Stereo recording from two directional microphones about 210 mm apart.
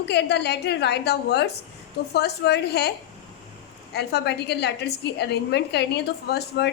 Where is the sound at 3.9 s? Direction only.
50° left (ahead or behind).